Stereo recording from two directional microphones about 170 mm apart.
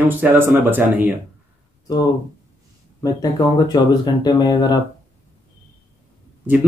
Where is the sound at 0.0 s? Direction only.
10° right (ahead or behind).